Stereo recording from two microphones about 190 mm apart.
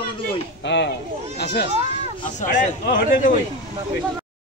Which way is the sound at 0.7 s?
70° left (ahead or behind).